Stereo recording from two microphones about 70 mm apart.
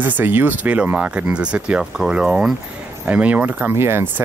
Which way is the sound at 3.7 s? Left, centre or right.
Right.